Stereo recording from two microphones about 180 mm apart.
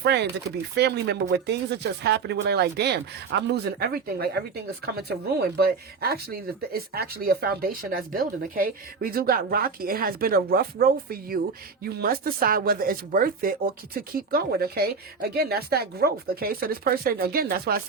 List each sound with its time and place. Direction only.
0.0 s speech: 65° right (ahead or behind)